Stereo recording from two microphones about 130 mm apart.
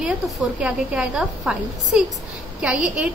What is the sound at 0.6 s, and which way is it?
A woman's voice, 10° right (ahead or behind).